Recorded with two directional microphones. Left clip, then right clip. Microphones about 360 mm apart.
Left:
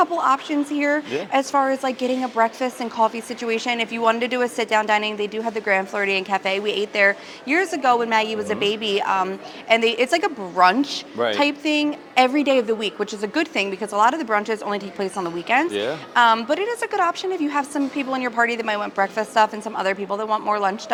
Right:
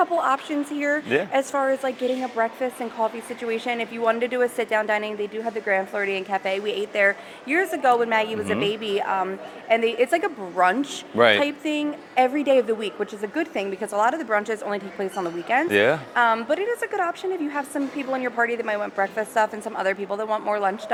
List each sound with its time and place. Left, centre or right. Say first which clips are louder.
0.0 s speech: left 2 dB; centre
15.7 s speech: right 6 dB; right
16.1 s a woman's voice: left 4 dB; centre